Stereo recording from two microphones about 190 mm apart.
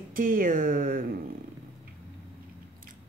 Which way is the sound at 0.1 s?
45° right (ahead or behind).